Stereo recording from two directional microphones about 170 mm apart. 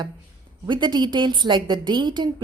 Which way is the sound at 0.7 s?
25° right (ahead or behind).